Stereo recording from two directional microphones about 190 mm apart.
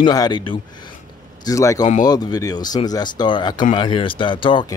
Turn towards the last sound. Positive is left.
turn(degrees=25)  # may be behind; listen again after turning